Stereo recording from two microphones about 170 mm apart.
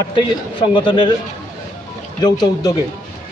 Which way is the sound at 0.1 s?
30° left (ahead or behind).